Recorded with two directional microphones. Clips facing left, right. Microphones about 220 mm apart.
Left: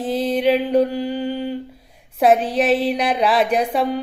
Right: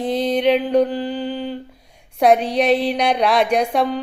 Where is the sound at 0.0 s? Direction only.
5° left (ahead or behind).